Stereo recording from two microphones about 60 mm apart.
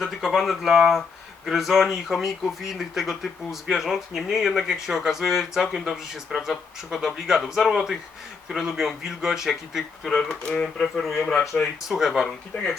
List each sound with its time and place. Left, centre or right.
0.0 s speech: centre
11.3 s speech: centre
11.9 s speech: centre
12.5 s speech: left